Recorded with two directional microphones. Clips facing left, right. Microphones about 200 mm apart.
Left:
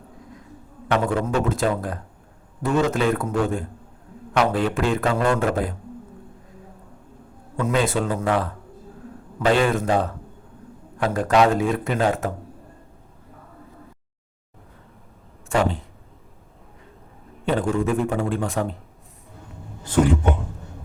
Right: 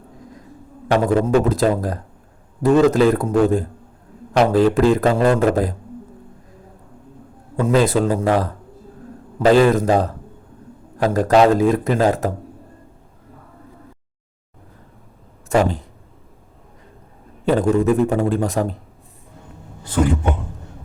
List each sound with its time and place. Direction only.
0.9 s a man's voice: 35° right (ahead or behind)
7.6 s a man's voice: 35° right (ahead or behind)
15.5 s a man's voice: 40° right (ahead or behind)
17.4 s a man's voice: 40° right (ahead or behind)